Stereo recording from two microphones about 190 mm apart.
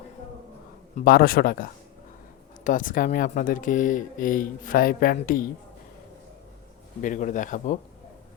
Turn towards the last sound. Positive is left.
turn(degrees=40)  # may be behind; listen again after turning